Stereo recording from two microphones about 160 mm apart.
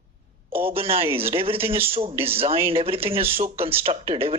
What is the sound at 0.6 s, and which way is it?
Speech, 35° right (ahead or behind).